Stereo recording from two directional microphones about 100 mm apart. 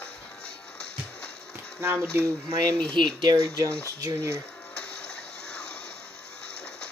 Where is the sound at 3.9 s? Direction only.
35° right (ahead or behind).